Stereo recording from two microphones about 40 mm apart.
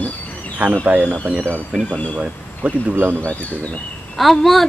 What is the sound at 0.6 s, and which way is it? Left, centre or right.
Speech, right.